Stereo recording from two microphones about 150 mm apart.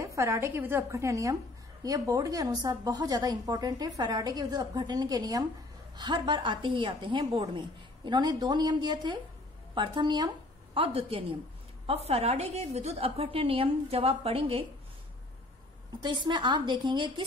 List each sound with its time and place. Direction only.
0.0 s a woman's voice: 20° right (ahead or behind); by 14.6 s 40° right (ahead or behind)
16.0 s a woman's voice: 30° right (ahead or behind)